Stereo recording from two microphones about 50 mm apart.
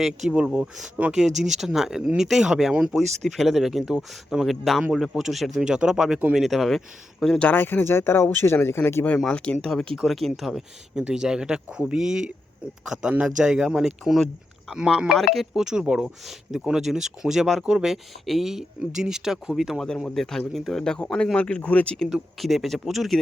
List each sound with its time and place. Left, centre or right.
0.3 s speech: centre
1.1 s speech: centre
2.9 s speech: centre
7.5 s speech: left
9.1 s speech: centre
10.9 s speech: centre
15.2 s speech: centre
15.5 s speech: centre
20.1 s speech: centre
20.8 s speech: centre
22.4 s speech: centre